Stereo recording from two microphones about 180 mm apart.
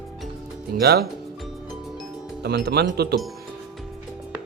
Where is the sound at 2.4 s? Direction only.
65° right (ahead or behind).